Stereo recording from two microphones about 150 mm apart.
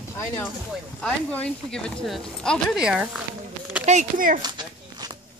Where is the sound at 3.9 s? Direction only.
60° right (ahead or behind).